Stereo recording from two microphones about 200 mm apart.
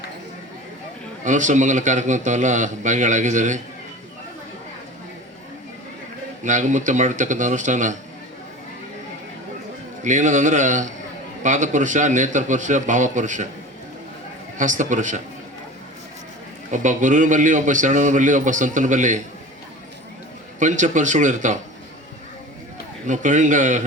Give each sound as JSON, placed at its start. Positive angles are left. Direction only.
{"t": 1.2, "sound": "a man's voice", "side_deg": -40}
{"t": 6.4, "sound": "a man's voice", "side_deg": -40}
{"t": 10.0, "sound": "a man's voice", "side_deg": -40}
{"t": 14.6, "sound": "a man's voice", "side_deg": -40}
{"t": 16.7, "sound": "a man's voice", "side_deg": -40}
{"t": 20.6, "sound": "a man's voice", "side_deg": -40}
{"t": 23.0, "sound": "a man's voice", "side_deg": -40}